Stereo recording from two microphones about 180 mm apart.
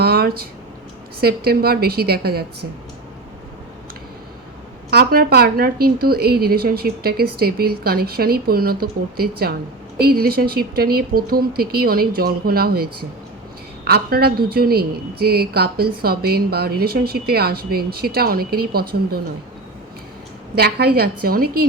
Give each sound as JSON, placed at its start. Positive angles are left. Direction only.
{"t": 0.0, "sound": "a sound", "side_deg": -60}
{"t": 1.2, "sound": "a woman's voice", "side_deg": -60}
{"t": 4.9, "sound": "a woman's voice", "side_deg": -60}
{"t": 20.6, "sound": "a woman's voice", "side_deg": -60}